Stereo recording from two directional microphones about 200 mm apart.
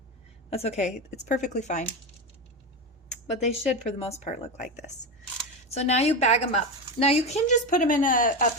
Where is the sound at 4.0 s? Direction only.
35° left (ahead or behind).